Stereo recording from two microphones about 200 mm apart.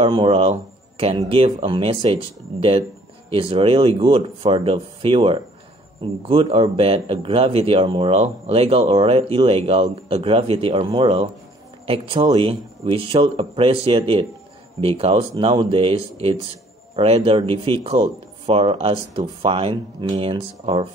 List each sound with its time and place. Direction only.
0.0 s a man's voice: 25° right (ahead or behind)
3.3 s a man's voice: 25° right (ahead or behind)